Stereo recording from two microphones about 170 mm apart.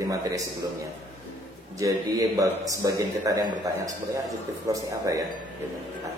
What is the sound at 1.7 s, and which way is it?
A man's voice, 20° right (ahead or behind).